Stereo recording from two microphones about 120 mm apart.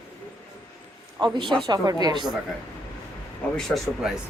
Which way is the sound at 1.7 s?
35° right (ahead or behind).